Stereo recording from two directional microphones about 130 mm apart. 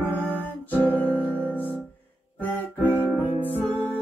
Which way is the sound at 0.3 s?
15° left (ahead or behind).